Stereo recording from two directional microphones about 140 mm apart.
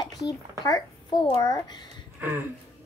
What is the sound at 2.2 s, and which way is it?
Speech, 15° right (ahead or behind).